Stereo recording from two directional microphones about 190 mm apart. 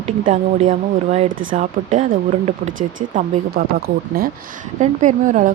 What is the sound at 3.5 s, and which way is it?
Speech, 55° right (ahead or behind).